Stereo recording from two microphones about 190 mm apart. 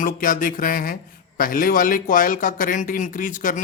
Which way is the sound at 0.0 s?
45° left (ahead or behind).